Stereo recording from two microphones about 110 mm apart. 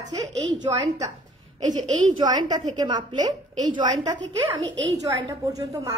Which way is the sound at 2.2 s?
40° right (ahead or behind).